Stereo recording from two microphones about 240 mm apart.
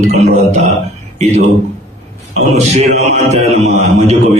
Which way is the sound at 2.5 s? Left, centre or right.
Right.